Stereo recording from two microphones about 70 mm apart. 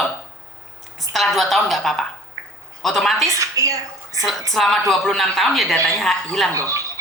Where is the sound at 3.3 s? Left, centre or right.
Right.